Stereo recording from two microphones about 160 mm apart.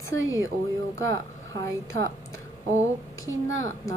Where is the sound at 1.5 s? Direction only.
20° left (ahead or behind).